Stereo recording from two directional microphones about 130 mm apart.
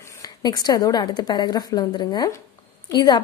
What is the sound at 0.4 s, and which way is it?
A woman's voice, 30° left (ahead or behind).